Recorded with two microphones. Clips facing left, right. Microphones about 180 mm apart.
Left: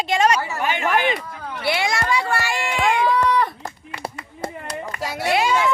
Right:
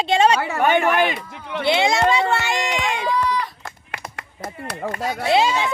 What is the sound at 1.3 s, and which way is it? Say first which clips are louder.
Speech: right 3 dB; 75° right (ahead or behind).